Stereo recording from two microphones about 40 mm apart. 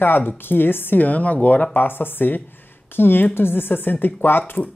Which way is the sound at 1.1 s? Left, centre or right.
Left.